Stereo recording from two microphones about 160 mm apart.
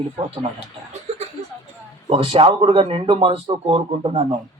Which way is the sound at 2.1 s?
35° right (ahead or behind).